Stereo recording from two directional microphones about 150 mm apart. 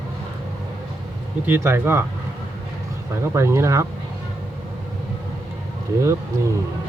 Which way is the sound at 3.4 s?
20° right (ahead or behind).